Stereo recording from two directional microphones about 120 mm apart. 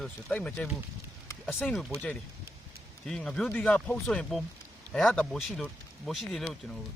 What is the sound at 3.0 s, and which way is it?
Speech, 5° left (ahead or behind).